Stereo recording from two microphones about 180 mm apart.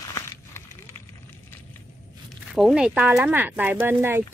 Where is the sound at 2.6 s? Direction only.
5° right (ahead or behind).